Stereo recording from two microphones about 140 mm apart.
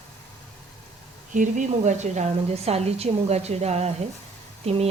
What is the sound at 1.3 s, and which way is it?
A woman's voice, 60° right (ahead or behind).